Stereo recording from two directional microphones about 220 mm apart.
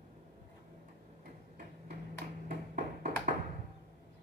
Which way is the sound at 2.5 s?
40° right (ahead or behind).